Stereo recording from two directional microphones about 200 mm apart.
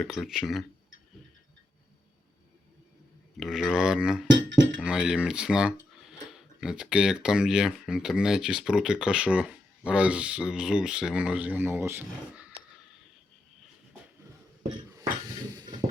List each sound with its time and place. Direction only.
0.0 s speech: centre (ahead or behind)
3.4 s speech: centre (ahead or behind)
4.3 s chink: 65° right (ahead or behind)
4.8 s speech: 5° right (ahead or behind)